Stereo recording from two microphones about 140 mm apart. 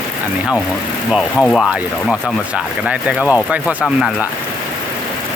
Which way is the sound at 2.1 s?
5° right (ahead or behind).